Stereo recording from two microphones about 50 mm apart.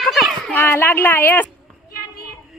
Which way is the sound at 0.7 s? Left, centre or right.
Left.